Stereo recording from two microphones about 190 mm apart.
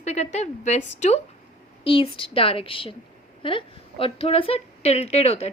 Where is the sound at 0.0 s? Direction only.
35° left (ahead or behind).